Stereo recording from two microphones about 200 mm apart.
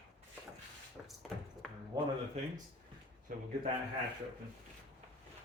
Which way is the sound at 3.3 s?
45° right (ahead or behind).